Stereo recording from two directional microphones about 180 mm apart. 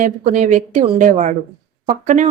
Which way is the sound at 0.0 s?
45° right (ahead or behind).